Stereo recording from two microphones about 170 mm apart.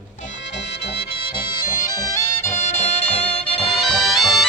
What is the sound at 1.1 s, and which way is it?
Music, 30° left (ahead or behind).